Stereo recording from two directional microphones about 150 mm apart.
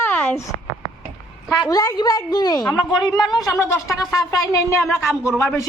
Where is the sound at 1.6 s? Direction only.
25° left (ahead or behind).